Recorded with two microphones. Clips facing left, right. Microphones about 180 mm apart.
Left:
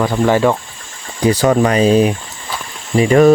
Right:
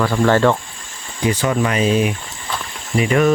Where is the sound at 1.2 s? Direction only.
35° left (ahead or behind).